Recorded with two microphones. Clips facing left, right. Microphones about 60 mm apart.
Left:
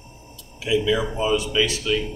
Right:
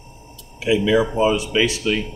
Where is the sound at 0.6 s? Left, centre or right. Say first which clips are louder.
Right 4 dB; right.